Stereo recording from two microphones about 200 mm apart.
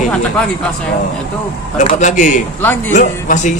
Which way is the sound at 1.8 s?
35° left (ahead or behind).